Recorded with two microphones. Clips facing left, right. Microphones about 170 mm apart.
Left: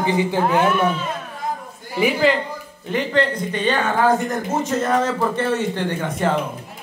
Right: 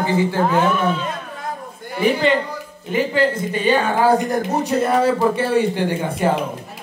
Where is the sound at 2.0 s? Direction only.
5° left (ahead or behind).